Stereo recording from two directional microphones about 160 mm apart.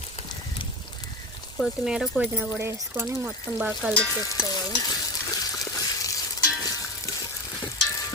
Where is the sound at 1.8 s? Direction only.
5° right (ahead or behind).